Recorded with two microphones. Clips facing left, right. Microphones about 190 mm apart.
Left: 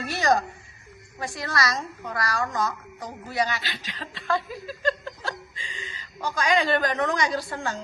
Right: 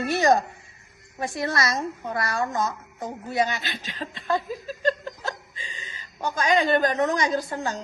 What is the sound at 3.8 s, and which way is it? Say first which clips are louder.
Speech: right 4 dB; 45° right (ahead or behind).